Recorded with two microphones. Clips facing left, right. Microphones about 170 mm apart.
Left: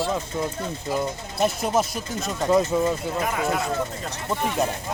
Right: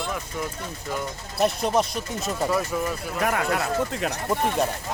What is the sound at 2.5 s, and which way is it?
Speech, 20° left (ahead or behind).